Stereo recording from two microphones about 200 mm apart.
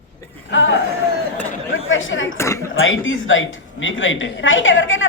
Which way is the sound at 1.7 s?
80° left.